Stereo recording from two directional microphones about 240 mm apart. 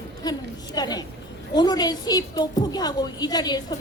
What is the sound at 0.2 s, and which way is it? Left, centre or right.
A woman's voice, centre.